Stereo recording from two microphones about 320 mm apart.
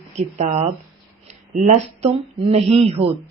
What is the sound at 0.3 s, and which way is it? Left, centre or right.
Speech, centre.